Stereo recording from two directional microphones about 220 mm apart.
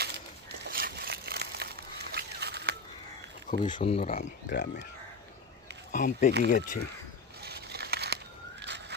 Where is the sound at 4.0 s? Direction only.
40° left (ahead or behind).